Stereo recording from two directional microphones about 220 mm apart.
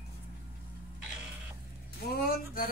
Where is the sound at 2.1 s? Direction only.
45° left (ahead or behind).